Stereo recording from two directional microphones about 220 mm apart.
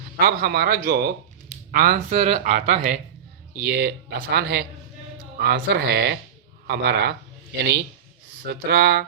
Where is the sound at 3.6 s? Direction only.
45° right (ahead or behind).